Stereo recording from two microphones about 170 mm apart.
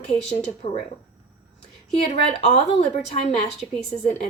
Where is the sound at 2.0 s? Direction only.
35° left (ahead or behind).